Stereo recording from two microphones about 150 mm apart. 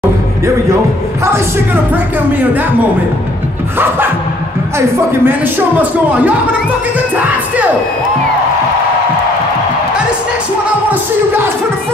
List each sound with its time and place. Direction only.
1.2 s speech: 15° right (ahead or behind)
3.7 s speech: 15° right (ahead or behind)
10.9 s speech: 15° right (ahead or behind)